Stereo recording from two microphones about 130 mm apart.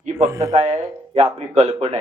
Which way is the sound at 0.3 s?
25° right (ahead or behind).